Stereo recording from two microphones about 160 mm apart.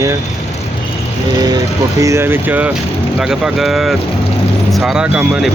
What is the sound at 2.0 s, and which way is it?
Speech, 15° right (ahead or behind).